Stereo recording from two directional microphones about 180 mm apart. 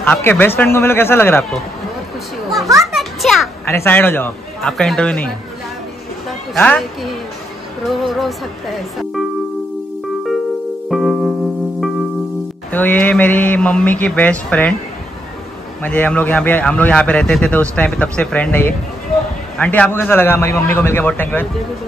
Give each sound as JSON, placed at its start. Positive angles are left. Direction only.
{"t": 0.0, "sound": "speech", "side_deg": 10}
{"t": 2.8, "sound": "children playing", "side_deg": 0}
{"t": 3.6, "sound": "speech", "side_deg": 15}
{"t": 6.5, "sound": "speech", "side_deg": 5}
{"t": 10.9, "sound": "music", "side_deg": 0}
{"t": 12.7, "sound": "speech", "side_deg": 10}
{"t": 15.8, "sound": "speech", "side_deg": 10}